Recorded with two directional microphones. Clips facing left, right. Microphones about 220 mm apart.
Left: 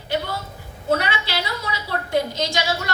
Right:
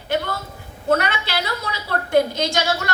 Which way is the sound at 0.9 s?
50° right (ahead or behind).